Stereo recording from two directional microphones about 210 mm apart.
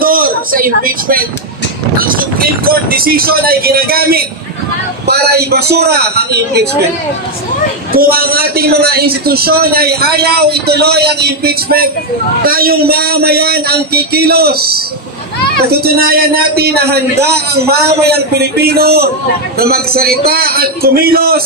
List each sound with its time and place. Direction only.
0.0 s a man's voice: 45° right (ahead or behind)
7.9 s a man's voice: 45° right (ahead or behind)